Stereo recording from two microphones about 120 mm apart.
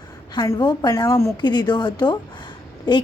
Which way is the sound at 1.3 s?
35° left (ahead or behind).